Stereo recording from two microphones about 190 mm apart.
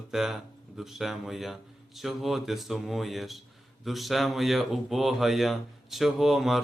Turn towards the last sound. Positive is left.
turn(degrees=0)  # may be behind; listen again after turning